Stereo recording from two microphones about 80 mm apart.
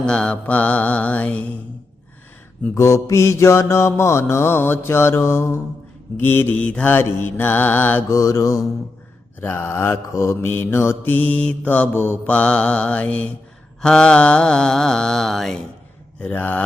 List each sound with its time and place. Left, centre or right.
0.0 s mantra: centre
2.7 s mantra: left
6.7 s mantra: centre
6.9 s mantra: left
8.1 s mantra: left
9.4 s mantra: left; by 15.5 s centre
16.3 s mantra: left